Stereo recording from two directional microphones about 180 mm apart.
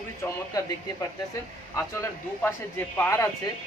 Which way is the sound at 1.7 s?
15° left (ahead or behind).